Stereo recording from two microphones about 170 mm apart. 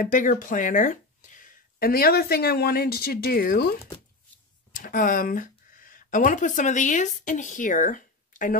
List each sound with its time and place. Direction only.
0.0 s speech: 50° left (ahead or behind)
4.7 s speech: 55° left (ahead or behind)